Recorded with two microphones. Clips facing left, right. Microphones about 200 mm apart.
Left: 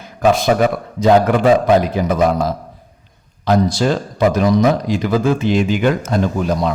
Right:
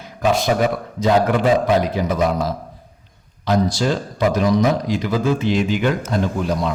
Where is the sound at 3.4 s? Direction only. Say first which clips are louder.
Left 3 dB; 55° left (ahead or behind).